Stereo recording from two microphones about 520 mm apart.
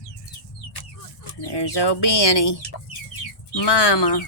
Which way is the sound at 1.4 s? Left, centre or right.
Left.